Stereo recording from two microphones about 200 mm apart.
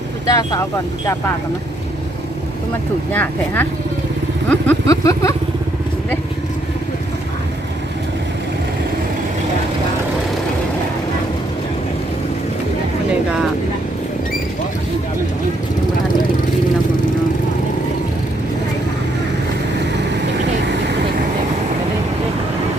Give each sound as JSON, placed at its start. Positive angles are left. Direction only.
{"t": 0.3, "sound": "speech", "side_deg": 15}
{"t": 3.1, "sound": "speech", "side_deg": 10}
{"t": 4.4, "sound": "vehicle", "side_deg": 10}